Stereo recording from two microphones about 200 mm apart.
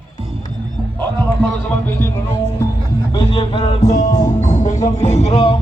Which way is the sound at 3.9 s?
35° left (ahead or behind).